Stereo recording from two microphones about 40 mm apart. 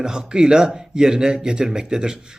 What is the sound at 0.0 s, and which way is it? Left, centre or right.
A man's voice, centre.